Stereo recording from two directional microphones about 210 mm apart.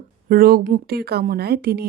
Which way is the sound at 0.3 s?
45° right (ahead or behind).